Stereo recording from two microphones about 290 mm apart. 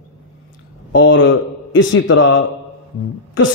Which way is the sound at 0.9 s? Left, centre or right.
Left.